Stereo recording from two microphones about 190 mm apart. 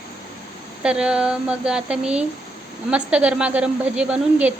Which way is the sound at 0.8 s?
5° right (ahead or behind).